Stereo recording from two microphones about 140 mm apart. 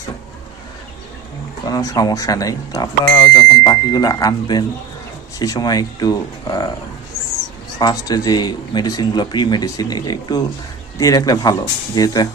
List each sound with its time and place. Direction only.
1.6 s speech: 25° left (ahead or behind)
7.8 s speech: 30° left (ahead or behind)